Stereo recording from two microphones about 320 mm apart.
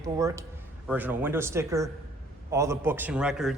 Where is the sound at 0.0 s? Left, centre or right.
Centre.